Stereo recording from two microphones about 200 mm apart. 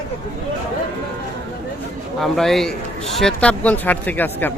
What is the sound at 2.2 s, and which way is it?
Speech, centre (ahead or behind).